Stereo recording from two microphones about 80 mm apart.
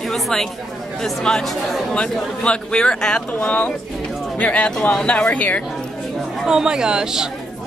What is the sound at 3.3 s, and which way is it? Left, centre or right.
A woman's voice, centre.